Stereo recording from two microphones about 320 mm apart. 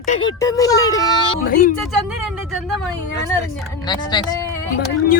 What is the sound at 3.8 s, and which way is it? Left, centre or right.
Speech, centre.